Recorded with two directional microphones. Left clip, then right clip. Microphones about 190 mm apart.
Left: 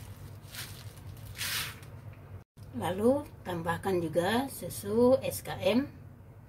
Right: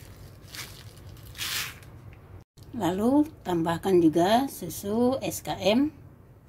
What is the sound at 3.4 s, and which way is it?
A woman's voice, 40° right (ahead or behind).